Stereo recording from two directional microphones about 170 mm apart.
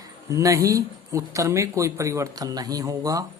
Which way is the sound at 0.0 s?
20° right (ahead or behind).